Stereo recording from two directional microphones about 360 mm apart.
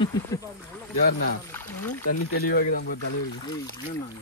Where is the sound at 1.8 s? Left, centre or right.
Left.